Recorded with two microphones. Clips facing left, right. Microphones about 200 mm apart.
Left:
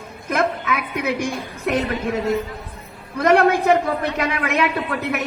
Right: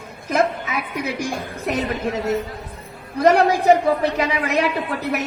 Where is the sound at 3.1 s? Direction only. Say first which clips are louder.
Even; 55° left (ahead or behind).